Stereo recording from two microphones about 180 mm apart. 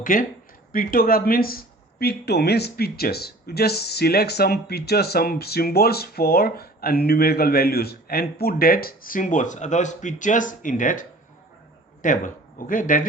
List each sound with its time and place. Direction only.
0.0 s speech: 50° left (ahead or behind)
12.0 s speech: 45° left (ahead or behind)